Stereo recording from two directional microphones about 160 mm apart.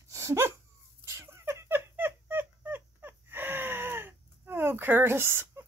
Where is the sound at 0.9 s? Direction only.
15° right (ahead or behind).